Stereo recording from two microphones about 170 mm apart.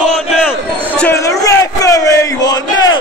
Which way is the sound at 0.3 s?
5° left (ahead or behind).